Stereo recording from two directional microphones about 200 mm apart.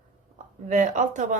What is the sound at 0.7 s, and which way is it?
Speech, 40° right (ahead or behind).